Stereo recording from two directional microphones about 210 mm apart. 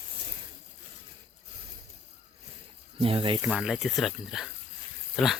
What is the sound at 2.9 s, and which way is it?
Snake, 25° right (ahead or behind).